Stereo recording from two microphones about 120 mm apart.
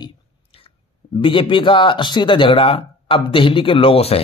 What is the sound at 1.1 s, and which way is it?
A man's voice, 45° left (ahead or behind).